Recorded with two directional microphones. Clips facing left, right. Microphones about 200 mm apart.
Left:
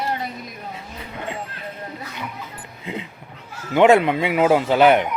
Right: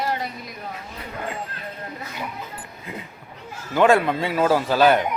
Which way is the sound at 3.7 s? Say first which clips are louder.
Left 3 dB; 20° left (ahead or behind).